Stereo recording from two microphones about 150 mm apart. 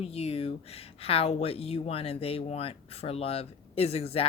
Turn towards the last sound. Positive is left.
turn(degrees=45)  # may be behind; listen again after turning